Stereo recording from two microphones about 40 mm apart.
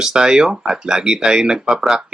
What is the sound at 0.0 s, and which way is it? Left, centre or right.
Speech, centre.